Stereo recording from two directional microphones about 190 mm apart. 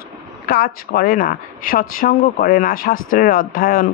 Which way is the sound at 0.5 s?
50° left (ahead or behind).